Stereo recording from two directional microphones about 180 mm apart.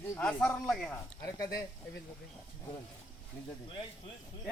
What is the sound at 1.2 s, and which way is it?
Speech, 20° left (ahead or behind).